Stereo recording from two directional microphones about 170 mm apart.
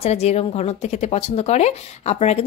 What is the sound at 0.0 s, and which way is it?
Speech, 40° left (ahead or behind).